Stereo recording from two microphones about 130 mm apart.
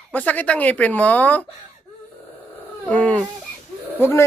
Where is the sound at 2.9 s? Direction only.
10° left (ahead or behind).